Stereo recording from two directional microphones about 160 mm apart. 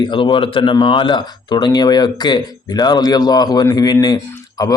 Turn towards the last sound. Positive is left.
turn(degrees=25)  # may be behind; listen again after turning